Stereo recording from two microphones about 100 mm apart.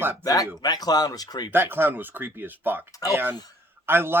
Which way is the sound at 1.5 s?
20° right (ahead or behind).